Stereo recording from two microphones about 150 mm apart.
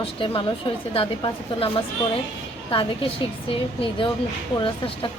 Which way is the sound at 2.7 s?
35° left (ahead or behind).